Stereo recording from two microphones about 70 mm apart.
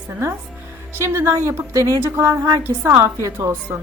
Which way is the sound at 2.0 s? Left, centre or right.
Right.